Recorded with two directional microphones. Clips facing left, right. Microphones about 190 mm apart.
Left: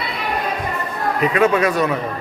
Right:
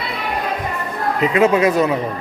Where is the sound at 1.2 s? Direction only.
25° right (ahead or behind).